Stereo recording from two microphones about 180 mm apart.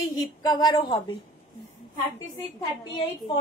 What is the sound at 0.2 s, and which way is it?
Speech, 20° left (ahead or behind).